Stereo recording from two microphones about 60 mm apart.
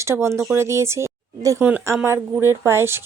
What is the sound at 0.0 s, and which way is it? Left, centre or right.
Speech, right.